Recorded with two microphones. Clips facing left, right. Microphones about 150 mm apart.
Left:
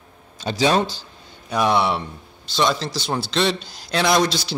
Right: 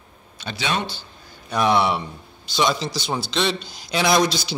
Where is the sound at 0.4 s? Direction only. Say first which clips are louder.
Left 7 dB; 35° left (ahead or behind).